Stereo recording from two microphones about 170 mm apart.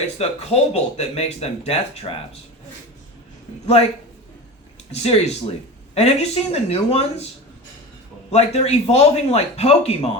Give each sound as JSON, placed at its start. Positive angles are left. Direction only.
{"t": 0.2, "sound": "speech", "side_deg": 35}
{"t": 4.9, "sound": "speech", "side_deg": 40}
{"t": 8.3, "sound": "speech", "side_deg": 40}